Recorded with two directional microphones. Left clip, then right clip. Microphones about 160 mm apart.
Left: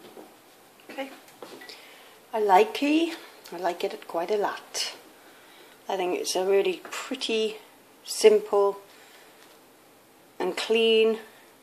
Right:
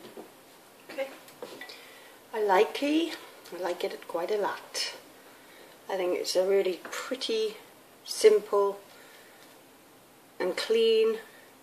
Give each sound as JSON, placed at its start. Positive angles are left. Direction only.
{"t": 2.3, "sound": "speech", "side_deg": 45}
{"t": 10.3, "sound": "speech", "side_deg": 35}